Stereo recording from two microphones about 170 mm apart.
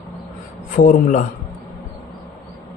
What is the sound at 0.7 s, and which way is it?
Speech, 45° left (ahead or behind).